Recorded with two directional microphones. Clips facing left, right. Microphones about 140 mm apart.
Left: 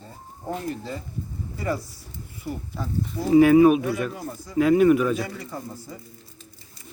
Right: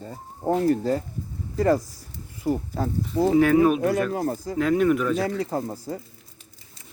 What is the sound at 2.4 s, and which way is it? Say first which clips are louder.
Speech: right 7 dB; 45° right (ahead or behind).